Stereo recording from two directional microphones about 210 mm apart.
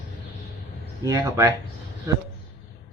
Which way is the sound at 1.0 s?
15° right (ahead or behind).